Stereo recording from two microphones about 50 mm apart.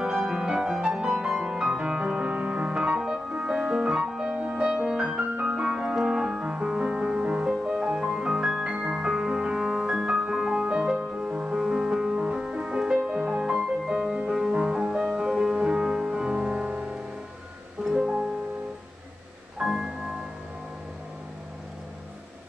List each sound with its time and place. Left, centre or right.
0.0 s music: centre
17.8 s music: centre
19.6 s music: centre